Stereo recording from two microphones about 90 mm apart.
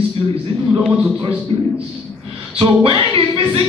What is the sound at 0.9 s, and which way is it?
Speech, 10° right (ahead or behind).